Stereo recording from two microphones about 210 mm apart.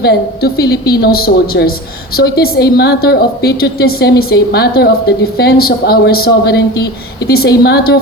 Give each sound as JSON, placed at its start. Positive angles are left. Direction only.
{"t": 0.0, "sound": "a woman's voice", "side_deg": 50}